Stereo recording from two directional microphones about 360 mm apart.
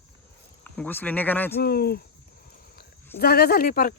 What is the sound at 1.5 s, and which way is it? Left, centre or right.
Speech, left.